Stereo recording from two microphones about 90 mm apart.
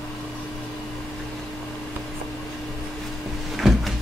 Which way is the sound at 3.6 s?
Centre (ahead or behind).